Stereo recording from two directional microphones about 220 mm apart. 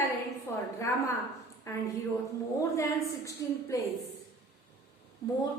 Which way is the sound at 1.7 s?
15° left (ahead or behind).